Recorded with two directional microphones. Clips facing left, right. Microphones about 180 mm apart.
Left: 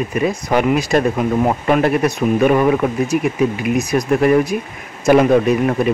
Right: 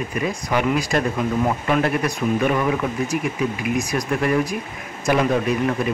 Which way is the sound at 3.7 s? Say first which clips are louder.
Left 9 dB; 25° left (ahead or behind).